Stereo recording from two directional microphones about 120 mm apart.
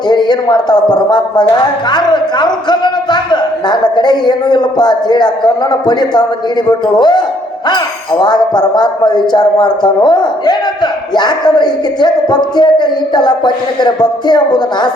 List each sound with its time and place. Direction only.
0.1 s speech: 35° left (ahead or behind)
8.2 s speech: 35° left (ahead or behind)